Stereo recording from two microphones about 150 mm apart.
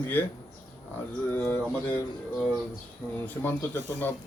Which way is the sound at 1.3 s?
10° left (ahead or behind).